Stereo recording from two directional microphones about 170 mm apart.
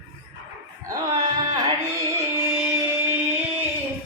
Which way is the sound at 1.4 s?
25° right (ahead or behind).